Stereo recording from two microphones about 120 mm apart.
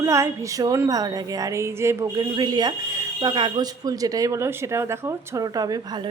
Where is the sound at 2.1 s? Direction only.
35° right (ahead or behind).